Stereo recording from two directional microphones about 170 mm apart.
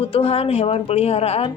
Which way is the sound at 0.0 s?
35° left (ahead or behind).